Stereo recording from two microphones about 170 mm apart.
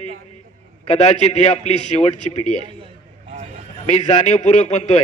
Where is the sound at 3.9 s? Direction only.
45° left (ahead or behind).